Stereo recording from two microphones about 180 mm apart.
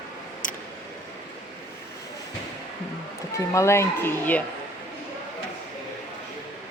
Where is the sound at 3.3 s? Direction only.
15° left (ahead or behind).